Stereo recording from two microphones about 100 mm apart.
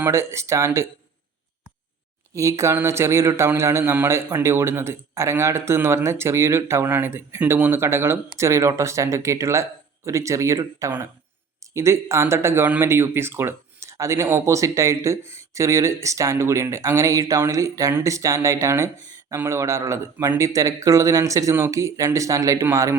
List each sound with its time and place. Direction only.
0.0 s a man's voice: 25° right (ahead or behind)
2.3 s a man's voice: 30° right (ahead or behind)